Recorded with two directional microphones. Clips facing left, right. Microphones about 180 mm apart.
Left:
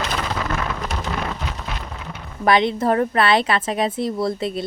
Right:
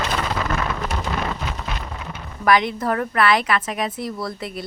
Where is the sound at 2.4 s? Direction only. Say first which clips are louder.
Left 2 dB; 25° left (ahead or behind).